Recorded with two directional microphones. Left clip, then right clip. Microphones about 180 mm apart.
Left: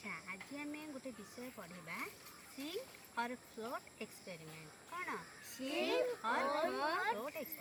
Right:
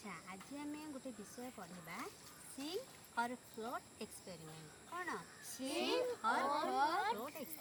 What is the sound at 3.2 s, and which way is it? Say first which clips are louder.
Speech: right 1 dB; centre (ahead or behind).